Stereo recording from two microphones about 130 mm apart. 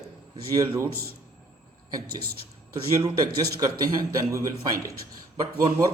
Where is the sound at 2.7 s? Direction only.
30° right (ahead or behind).